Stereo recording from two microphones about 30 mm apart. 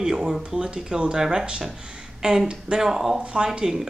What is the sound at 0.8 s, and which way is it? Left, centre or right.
Speech, right.